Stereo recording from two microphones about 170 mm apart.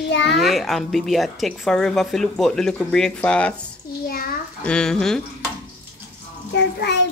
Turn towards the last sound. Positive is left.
turn(degrees=85)